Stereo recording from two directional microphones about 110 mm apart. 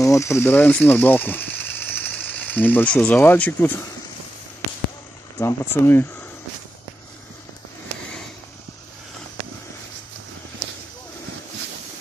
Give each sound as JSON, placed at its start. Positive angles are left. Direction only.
{"t": 0.0, "sound": "speech", "side_deg": 30}
{"t": 5.4, "sound": "speech", "side_deg": 20}